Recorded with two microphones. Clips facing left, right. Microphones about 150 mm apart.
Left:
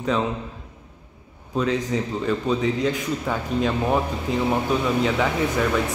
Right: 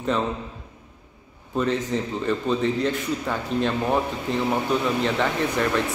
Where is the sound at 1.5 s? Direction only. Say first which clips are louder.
Left 1 dB; centre (ahead or behind).